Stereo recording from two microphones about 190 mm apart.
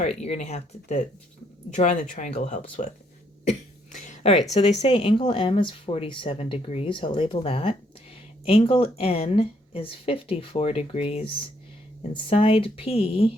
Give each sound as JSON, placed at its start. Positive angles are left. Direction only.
{"t": 0.2, "sound": "speech", "side_deg": 35}
{"t": 3.9, "sound": "a sound", "side_deg": 40}
{"t": 4.5, "sound": "speech", "side_deg": 35}